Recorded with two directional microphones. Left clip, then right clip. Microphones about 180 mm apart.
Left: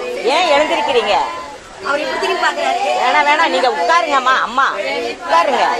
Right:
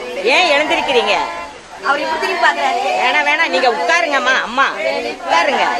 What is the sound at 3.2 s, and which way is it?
Speech, 15° right (ahead or behind).